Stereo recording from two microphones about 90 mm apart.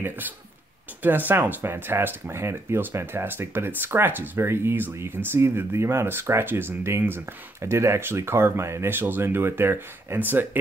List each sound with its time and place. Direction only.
1.0 s speech: 20° right (ahead or behind)